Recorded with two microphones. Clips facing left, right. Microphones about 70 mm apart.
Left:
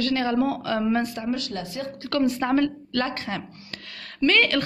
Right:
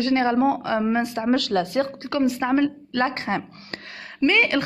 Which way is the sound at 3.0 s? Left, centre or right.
Right.